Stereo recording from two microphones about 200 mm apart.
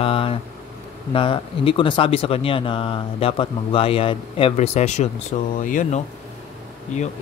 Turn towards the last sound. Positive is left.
turn(degrees=35)  # may be behind; listen again after turning